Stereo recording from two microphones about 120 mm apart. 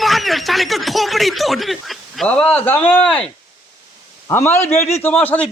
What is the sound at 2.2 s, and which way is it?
A man's voice, 10° left (ahead or behind).